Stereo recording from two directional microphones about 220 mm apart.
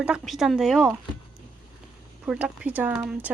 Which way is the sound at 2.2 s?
5° right (ahead or behind).